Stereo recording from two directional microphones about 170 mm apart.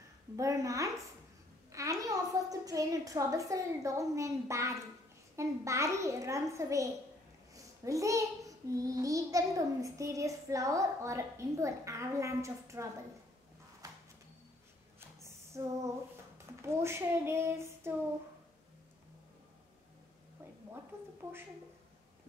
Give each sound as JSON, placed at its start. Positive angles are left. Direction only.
{"t": 0.4, "sound": "child singing", "side_deg": -20}
{"t": 5.3, "sound": "a child's voice", "side_deg": -15}
{"t": 7.5, "sound": "child singing", "side_deg": -20}
{"t": 13.8, "sound": "a sound", "side_deg": -20}
{"t": 15.2, "sound": "a sound", "side_deg": -15}
{"t": 16.3, "sound": "speech", "side_deg": -15}